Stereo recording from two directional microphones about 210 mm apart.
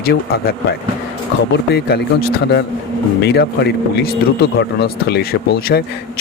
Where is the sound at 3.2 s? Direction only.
50° left (ahead or behind).